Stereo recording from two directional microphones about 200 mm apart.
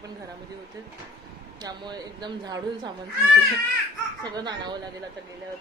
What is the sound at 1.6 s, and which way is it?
Speech, 20° right (ahead or behind).